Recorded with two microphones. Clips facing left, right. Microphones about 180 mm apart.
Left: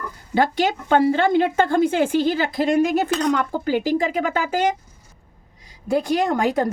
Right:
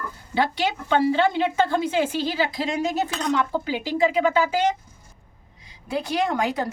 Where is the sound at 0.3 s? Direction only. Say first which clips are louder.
Left 4 dB; 50° left (ahead or behind).